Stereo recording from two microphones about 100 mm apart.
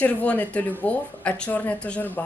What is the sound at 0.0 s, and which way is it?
A woman's voice, 15° left (ahead or behind).